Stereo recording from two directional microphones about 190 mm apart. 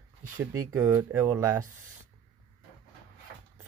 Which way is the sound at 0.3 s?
15° right (ahead or behind).